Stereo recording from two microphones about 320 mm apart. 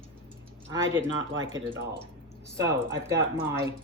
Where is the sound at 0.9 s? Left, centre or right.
Right.